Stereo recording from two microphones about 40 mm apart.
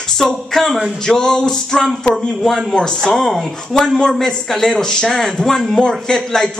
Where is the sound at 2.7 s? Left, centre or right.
Centre.